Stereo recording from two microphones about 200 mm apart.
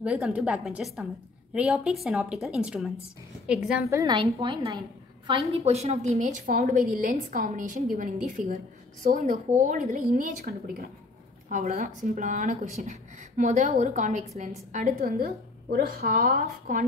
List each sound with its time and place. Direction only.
0.0 s a woman's voice: 5° right (ahead or behind)
3.9 s a woman's voice: 20° right (ahead or behind); by 16.8 s 40° right (ahead or behind)